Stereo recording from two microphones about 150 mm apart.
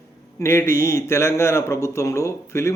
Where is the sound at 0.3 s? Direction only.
15° left (ahead or behind).